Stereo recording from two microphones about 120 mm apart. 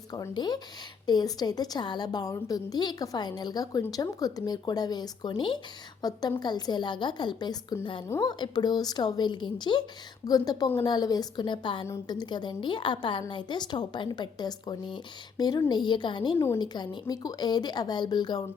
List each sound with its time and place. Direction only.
0.1 s a woman's voice: 35° left (ahead or behind)